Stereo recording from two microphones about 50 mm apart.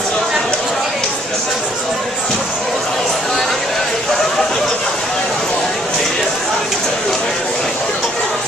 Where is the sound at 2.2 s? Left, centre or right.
Centre.